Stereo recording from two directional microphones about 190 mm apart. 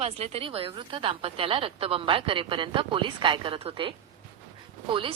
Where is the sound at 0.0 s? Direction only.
30° right (ahead or behind).